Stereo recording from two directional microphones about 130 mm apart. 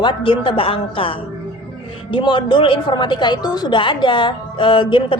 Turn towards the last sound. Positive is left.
turn(degrees=40)  # may be behind; listen again after turning